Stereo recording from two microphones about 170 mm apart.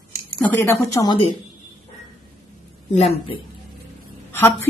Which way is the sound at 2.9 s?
40° left (ahead or behind).